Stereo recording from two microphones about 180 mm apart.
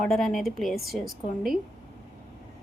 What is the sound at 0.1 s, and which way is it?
A woman's voice, centre (ahead or behind).